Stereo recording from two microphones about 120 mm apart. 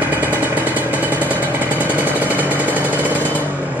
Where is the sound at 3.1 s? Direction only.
15° right (ahead or behind).